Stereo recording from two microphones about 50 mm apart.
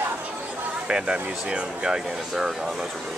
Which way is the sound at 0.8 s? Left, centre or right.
Centre.